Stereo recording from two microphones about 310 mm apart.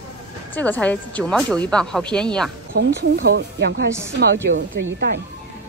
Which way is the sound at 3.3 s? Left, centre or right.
Right.